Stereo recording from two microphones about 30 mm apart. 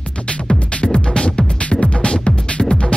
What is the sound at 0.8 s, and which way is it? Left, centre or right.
Music, left.